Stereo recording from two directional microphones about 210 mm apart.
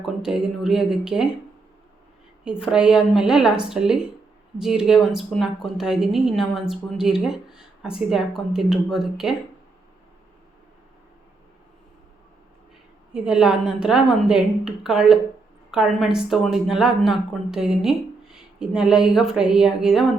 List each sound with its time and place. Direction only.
0.0 s a woman's voice: 5° right (ahead or behind)
2.4 s a woman's voice: 5° right (ahead or behind)
13.1 s a woman's voice: 5° right (ahead or behind)